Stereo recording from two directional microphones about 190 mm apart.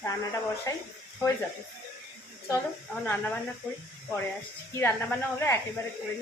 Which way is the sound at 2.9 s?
10° left (ahead or behind).